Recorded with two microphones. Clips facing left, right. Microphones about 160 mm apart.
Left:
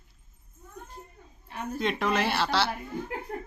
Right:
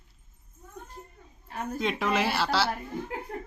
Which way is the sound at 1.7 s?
Centre (ahead or behind).